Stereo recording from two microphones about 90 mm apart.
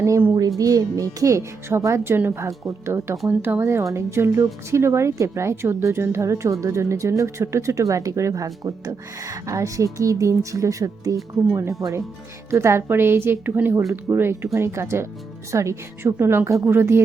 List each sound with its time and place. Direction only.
0.3 s a woman's voice: 45° right (ahead or behind); by 17.0 s 30° right (ahead or behind)